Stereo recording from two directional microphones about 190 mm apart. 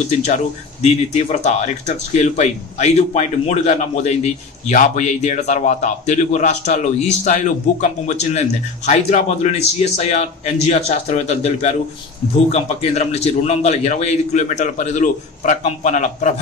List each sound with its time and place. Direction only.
1.1 s speech: 35° left (ahead or behind)